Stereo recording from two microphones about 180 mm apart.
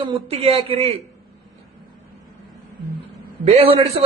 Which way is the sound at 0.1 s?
35° right (ahead or behind).